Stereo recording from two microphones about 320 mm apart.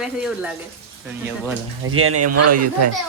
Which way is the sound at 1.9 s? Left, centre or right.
Right.